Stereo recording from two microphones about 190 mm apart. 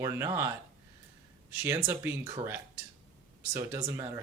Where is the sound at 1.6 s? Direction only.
15° right (ahead or behind).